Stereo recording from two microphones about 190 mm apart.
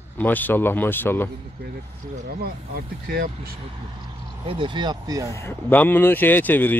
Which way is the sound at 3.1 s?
55° right (ahead or behind).